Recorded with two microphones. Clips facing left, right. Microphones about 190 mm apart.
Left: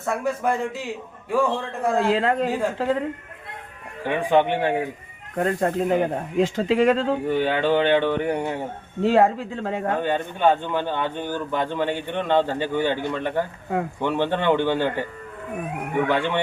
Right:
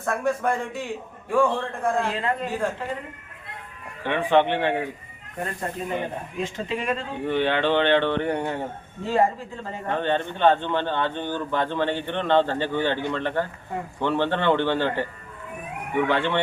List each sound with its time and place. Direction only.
0.0 s a man's voice: 5° left (ahead or behind)
2.0 s speech: 90° left
4.0 s a man's voice: 10° left (ahead or behind)
5.4 s speech: 75° left (ahead or behind)
7.3 s a man's voice: 10° left (ahead or behind)
9.0 s speech: 75° left (ahead or behind)
9.9 s a man's voice: 10° left (ahead or behind)
16.0 s a man's voice: 15° left (ahead or behind)